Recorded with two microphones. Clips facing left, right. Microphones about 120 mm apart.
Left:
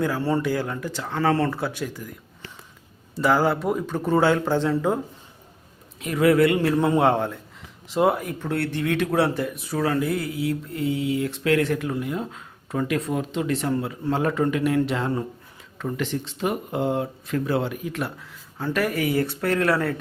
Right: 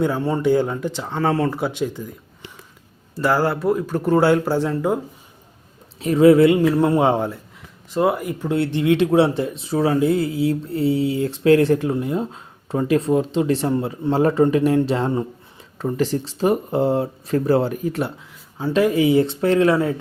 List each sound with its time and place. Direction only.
0.0 s speech: 20° right (ahead or behind)
3.2 s a man's voice: centre (ahead or behind)
6.0 s speech: 30° right (ahead or behind)
6.7 s a man's voice: 5° right (ahead or behind)
7.9 s speech: centre (ahead or behind); by 18.1 s 35° right (ahead or behind)
18.5 s speech: 20° right (ahead or behind)